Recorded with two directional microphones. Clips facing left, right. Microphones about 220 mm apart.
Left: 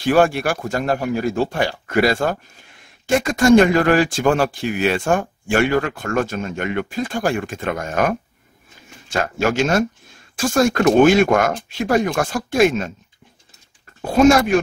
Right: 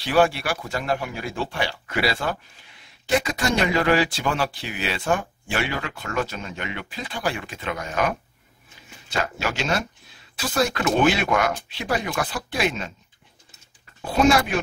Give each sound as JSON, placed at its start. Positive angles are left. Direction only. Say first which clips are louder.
{"t": 0.0, "sound": "a man's voice", "louder": "left 5 dB", "side_deg": 45}
{"t": 14.0, "sound": "a man's voice", "louder": "left 6 dB", "side_deg": 45}